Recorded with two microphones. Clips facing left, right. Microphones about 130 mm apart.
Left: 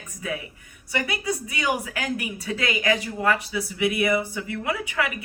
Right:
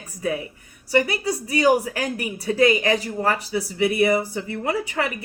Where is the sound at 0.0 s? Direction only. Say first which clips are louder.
Right 6 dB; 35° right (ahead or behind).